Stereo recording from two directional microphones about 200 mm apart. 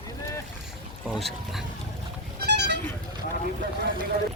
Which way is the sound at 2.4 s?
60° right (ahead or behind).